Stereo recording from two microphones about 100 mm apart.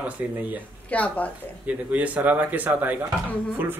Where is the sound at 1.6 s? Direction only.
15° right (ahead or behind).